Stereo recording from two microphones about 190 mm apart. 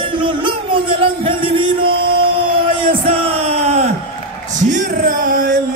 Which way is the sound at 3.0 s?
30° right (ahead or behind).